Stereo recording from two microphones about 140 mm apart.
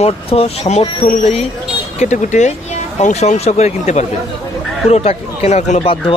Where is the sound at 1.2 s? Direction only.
50° left (ahead or behind).